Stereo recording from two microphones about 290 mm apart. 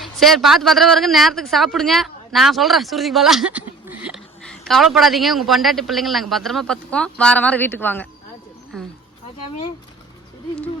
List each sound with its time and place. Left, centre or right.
0.0 s speech: centre